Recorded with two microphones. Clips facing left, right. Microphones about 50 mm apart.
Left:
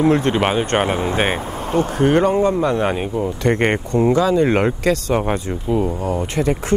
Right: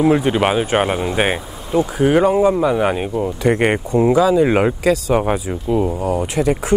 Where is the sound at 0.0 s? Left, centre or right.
Centre.